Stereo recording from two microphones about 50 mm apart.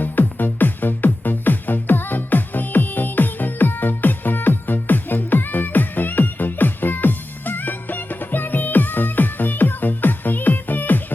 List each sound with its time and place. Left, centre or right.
0.0 s music: left